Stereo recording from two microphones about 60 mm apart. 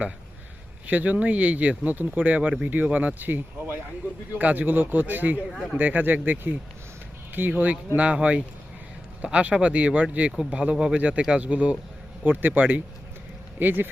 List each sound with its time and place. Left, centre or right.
0.9 s speech: right
5.5 s speech: centre
5.7 s speech: right